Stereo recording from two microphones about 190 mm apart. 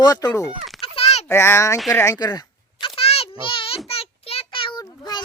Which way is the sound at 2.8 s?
30° left (ahead or behind).